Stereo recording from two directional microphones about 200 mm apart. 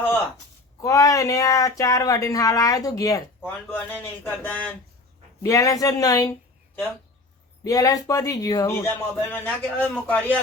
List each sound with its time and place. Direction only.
0.8 s speech: 15° left (ahead or behind)
7.6 s speech: 15° left (ahead or behind)